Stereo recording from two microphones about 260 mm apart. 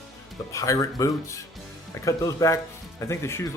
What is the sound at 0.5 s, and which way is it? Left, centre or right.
Speech, centre.